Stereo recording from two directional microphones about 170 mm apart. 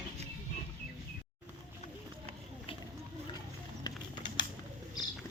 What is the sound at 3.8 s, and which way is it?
Music, 25° left (ahead or behind).